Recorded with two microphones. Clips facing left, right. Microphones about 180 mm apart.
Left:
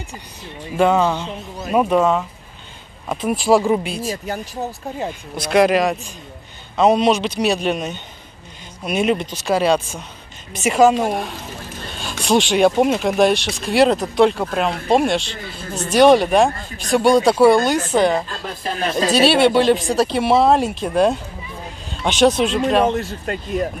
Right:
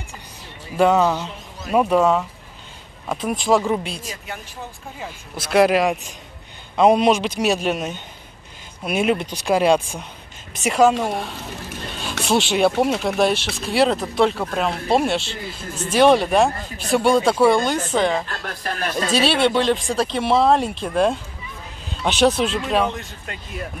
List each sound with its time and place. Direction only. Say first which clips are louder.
0.7 s speech: even; 5° right (ahead or behind)
4.1 s speech: left 8 dB; 40° left (ahead or behind)
5.4 s a man's voice: left 1 dB; 5° right (ahead or behind)
10.5 s speech: left 2 dB; centre (ahead or behind)
12.0 s a sound: left 3 dB; 5° right (ahead or behind)
12.8 s speech: left 3 dB; centre (ahead or behind)
18.5 s speech: left 4 dB; 25° left (ahead or behind)
19.1 s speech: left 4 dB; 5° left (ahead or behind)
22.8 s speech: left 5 dB; 40° left (ahead or behind)